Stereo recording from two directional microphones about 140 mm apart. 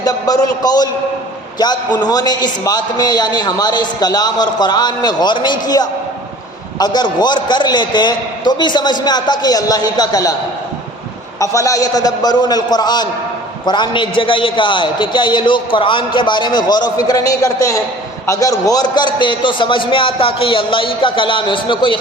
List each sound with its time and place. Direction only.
0.0 s a man's voice: 25° left (ahead or behind)
11.3 s a man's voice: 25° left (ahead or behind)